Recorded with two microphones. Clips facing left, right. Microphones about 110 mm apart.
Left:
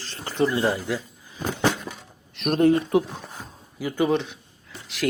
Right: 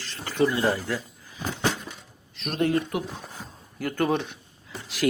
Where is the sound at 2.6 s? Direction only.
30° left (ahead or behind).